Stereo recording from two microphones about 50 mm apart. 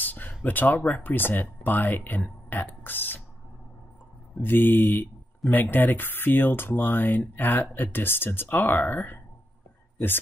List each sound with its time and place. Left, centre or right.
0.0 s a sound: left
0.4 s speech: left
4.4 s speech: left